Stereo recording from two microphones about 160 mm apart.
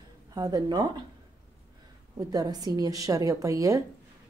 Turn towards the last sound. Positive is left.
turn(degrees=-20)  # may be behind; listen again after turning